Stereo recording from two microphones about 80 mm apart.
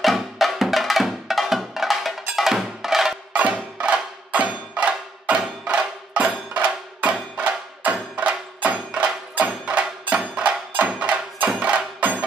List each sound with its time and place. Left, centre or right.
0.0 s music: centre